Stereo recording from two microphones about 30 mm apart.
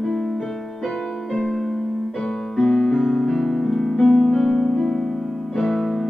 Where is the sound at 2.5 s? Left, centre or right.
Centre.